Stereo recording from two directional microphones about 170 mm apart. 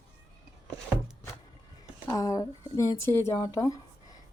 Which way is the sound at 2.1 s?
20° left (ahead or behind).